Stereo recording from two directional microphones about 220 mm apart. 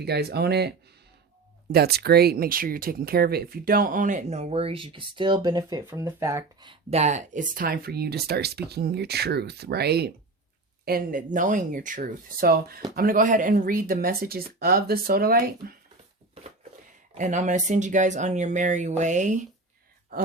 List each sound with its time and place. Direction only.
0.0 s speech: 45° right (ahead or behind)
1.7 s speech: 45° right (ahead or behind)
17.2 s speech: 35° right (ahead or behind)